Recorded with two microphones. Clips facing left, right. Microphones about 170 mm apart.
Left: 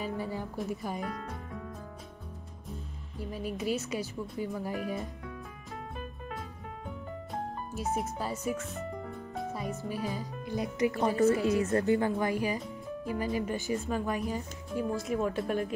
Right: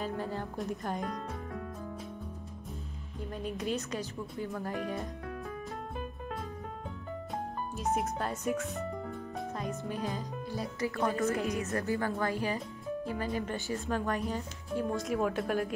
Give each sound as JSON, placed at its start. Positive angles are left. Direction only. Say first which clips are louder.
{"t": 0.0, "sound": "a sound", "louder": "even", "side_deg": 10}
{"t": 0.6, "sound": "a woman's voice", "louder": "even", "side_deg": 5}
{"t": 3.2, "sound": "speech", "louder": "left 1 dB", "side_deg": 5}
{"t": 7.9, "sound": "speech", "louder": "right 1 dB", "side_deg": 0}
{"t": 10.5, "sound": "speech", "louder": "left 6 dB", "side_deg": 20}
{"t": 13.7, "sound": "a woman's voice", "louder": "left 1 dB", "side_deg": 0}